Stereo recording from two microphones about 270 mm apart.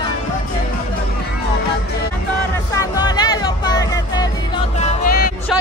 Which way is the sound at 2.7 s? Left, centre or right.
Centre.